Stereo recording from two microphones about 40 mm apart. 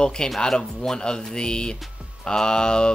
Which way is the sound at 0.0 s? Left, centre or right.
Left.